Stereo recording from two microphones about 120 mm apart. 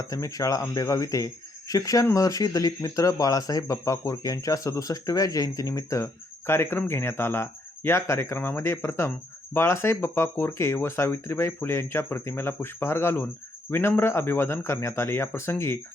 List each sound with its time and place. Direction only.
0.0 s speech: 30° left (ahead or behind)